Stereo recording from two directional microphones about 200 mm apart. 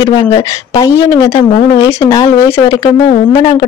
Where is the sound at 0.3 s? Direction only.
15° left (ahead or behind).